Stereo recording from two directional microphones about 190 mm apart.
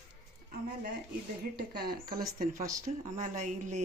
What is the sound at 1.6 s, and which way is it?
Speech, 55° right (ahead or behind).